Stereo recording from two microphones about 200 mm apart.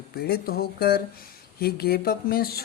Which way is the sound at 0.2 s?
50° left (ahead or behind).